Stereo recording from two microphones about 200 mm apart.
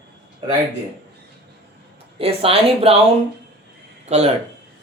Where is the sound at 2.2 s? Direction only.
30° right (ahead or behind).